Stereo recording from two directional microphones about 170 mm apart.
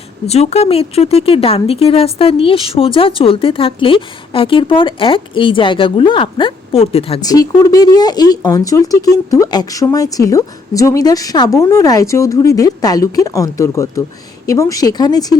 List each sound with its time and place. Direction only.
0.3 s speech: 40° left (ahead or behind)
7.2 s speech: 20° left (ahead or behind)